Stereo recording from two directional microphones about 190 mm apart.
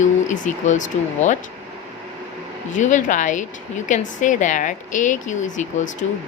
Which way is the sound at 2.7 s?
40° left (ahead or behind).